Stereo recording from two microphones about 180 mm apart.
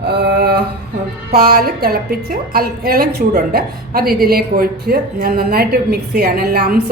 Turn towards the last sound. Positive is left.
turn(degrees=-60)  # may be behind; listen again after turning